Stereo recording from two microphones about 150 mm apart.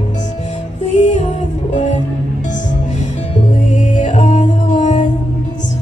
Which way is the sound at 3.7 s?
50° left (ahead or behind).